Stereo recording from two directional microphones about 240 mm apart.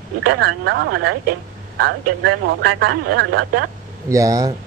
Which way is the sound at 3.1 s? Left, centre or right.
Right.